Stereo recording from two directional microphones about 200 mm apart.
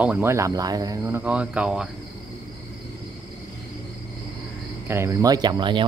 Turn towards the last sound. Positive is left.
turn(degrees=-20)  # may be behind; listen again after turning